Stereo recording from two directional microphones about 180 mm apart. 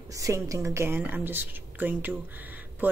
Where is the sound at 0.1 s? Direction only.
20° right (ahead or behind).